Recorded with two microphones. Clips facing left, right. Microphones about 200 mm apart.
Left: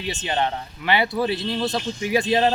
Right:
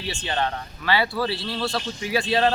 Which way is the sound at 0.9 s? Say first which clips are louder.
Left 2 dB; 20° left (ahead or behind).